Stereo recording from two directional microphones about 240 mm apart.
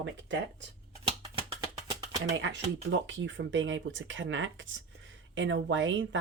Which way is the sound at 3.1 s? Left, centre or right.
Right.